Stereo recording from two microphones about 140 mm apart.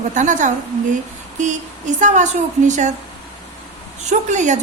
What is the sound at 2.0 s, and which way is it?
Speech, 60° right (ahead or behind).